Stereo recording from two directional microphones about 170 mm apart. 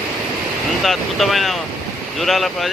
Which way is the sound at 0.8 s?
Centre (ahead or behind).